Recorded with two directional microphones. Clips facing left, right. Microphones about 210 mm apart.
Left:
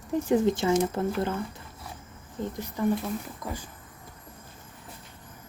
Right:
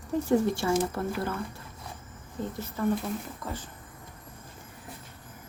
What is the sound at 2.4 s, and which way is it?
Speech, 15° left (ahead or behind).